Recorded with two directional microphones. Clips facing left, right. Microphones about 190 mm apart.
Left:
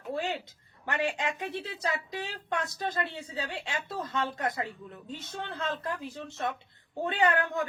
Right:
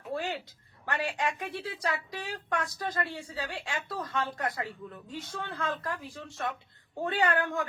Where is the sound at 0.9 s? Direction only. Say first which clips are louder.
Left 1 dB; 20° left (ahead or behind).